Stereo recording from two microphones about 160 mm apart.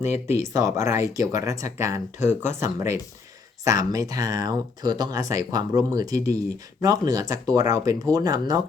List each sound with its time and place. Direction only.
0.3 s speech: 20° right (ahead or behind)
2.1 s speech: 45° left (ahead or behind)
2.6 s speech: 20° right (ahead or behind)